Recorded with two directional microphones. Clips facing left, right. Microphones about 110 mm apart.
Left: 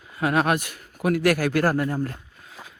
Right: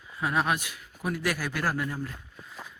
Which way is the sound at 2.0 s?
55° left (ahead or behind).